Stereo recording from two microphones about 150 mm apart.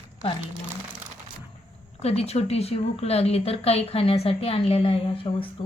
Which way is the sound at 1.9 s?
45° left (ahead or behind).